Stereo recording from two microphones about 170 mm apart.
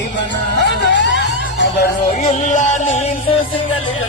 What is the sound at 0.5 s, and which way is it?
Music, 90° left.